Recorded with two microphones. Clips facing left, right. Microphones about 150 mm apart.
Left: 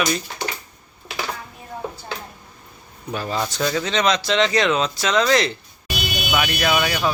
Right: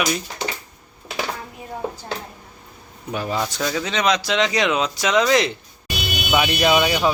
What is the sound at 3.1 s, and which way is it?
Speech, 10° right (ahead or behind).